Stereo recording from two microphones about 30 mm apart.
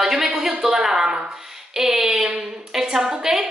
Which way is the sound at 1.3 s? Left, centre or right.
Centre.